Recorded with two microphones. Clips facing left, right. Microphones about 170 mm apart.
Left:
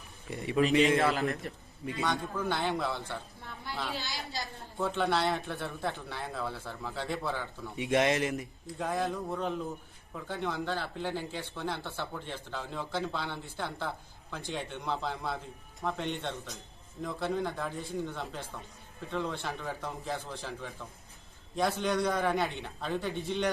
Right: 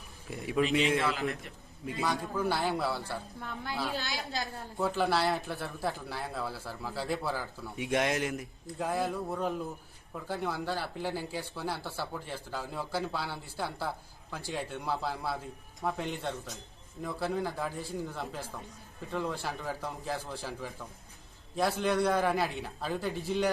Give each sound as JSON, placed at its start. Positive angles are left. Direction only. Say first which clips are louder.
{"t": 0.3, "sound": "speech", "louder": "left 2 dB", "side_deg": 0}
{"t": 0.9, "sound": "a man's voice", "louder": "left 3 dB", "side_deg": 40}
{"t": 1.8, "sound": "speech", "louder": "even", "side_deg": 0}
{"t": 4.3, "sound": "a woman's voice", "louder": "right 3 dB", "side_deg": -60}
{"t": 4.8, "sound": "speech", "louder": "right 1 dB", "side_deg": 0}